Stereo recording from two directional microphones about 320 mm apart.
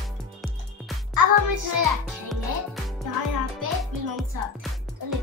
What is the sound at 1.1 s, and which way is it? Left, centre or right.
Music, right.